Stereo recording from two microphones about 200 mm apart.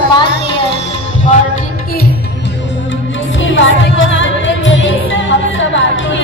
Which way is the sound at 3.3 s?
70° left (ahead or behind).